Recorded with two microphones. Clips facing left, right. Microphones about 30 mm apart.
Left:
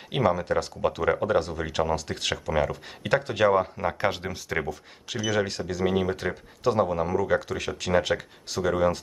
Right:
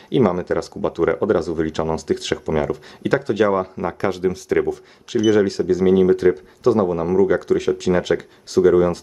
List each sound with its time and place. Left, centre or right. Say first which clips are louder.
0.1 s speech: right 6 dB; centre